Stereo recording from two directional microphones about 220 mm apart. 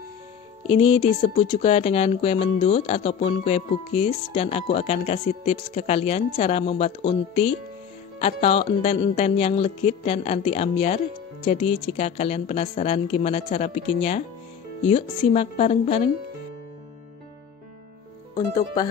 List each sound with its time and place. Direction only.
0.7 s speech: 25° left (ahead or behind)